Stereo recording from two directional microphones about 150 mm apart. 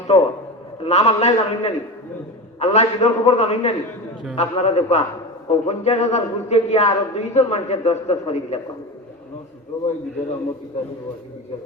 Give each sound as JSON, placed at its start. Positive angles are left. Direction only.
{"t": 0.1, "sound": "a man's voice", "side_deg": 40}